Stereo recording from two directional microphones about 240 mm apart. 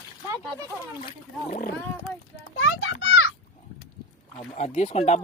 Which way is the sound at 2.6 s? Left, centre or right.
Left.